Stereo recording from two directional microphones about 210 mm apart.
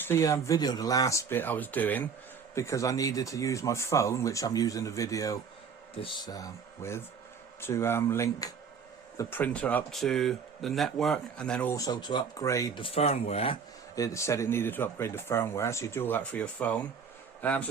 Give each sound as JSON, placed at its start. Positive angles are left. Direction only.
{"t": 0.0, "sound": "speech", "side_deg": 15}
{"t": 13.9, "sound": "a man's voice", "side_deg": 15}